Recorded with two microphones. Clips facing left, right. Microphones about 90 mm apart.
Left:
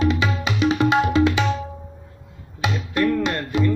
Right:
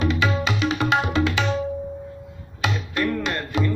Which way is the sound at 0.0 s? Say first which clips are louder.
Left 1 dB; 25° left (ahead or behind).